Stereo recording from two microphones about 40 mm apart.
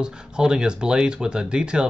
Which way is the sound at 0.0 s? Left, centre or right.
Centre.